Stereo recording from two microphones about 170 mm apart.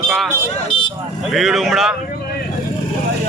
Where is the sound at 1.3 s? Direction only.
Centre (ahead or behind).